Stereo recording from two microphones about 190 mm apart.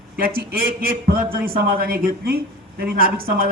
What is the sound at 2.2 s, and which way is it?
Speech, 55° right (ahead or behind).